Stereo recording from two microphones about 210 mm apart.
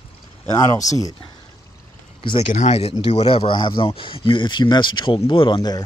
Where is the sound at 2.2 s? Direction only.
25° left (ahead or behind).